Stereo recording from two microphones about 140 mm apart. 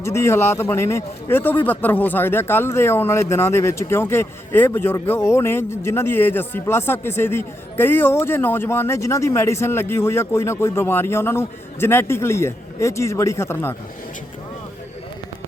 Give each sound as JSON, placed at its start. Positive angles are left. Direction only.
{"t": 0.0, "sound": "a man's voice", "side_deg": 20}